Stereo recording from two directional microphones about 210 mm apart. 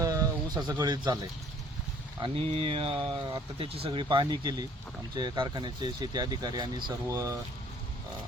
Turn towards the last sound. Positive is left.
turn(degrees=-15)  # may be behind; listen again after turning